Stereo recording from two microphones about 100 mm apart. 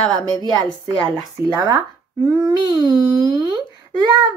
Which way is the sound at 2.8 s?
35° right (ahead or behind).